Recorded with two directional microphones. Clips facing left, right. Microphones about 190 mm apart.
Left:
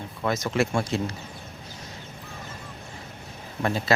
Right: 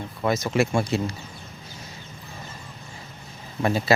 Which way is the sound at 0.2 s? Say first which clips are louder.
Right 2 dB; 10° right (ahead or behind).